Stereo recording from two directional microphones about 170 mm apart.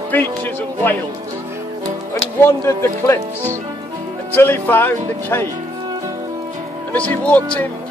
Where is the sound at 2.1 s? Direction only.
15° left (ahead or behind).